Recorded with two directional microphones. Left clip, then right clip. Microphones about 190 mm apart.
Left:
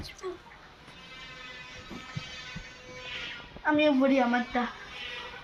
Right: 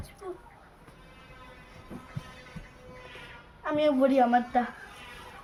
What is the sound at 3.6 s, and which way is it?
Speech, 40° right (ahead or behind).